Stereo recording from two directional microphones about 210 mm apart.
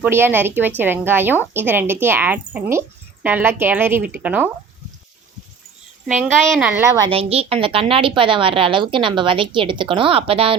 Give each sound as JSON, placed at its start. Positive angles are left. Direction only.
{"t": 0.0, "sound": "a woman's voice", "side_deg": -10}
{"t": 6.1, "sound": "a woman's voice", "side_deg": 0}
{"t": 7.1, "sound": "a woman's voice", "side_deg": -30}